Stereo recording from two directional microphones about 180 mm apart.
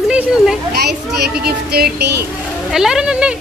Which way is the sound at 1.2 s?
60° right (ahead or behind).